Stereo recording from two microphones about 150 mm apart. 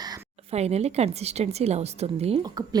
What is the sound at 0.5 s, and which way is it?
A woman's voice, 45° right (ahead or behind).